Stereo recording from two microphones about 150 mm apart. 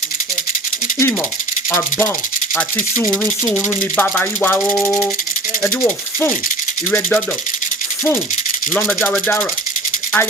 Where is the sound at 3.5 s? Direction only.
10° left (ahead or behind).